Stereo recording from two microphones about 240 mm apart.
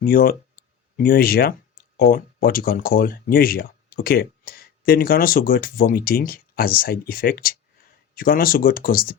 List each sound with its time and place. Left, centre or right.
0.0 s speech: left